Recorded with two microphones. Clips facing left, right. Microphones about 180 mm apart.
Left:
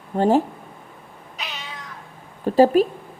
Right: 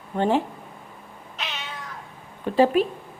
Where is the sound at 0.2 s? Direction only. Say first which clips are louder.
Left 4 dB; 40° left (ahead or behind).